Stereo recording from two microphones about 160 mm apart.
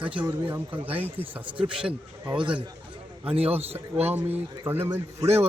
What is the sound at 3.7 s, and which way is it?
A man's voice, 15° right (ahead or behind).